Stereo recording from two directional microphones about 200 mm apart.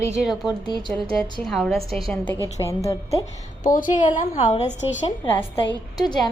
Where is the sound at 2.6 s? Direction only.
15° left (ahead or behind).